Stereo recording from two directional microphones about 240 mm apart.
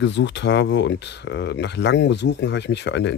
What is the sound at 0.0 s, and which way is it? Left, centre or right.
Speech, left.